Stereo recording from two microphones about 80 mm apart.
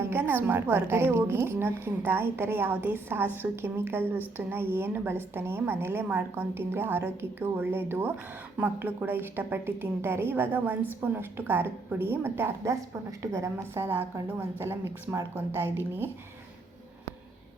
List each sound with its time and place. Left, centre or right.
0.0 s a woman's voice: right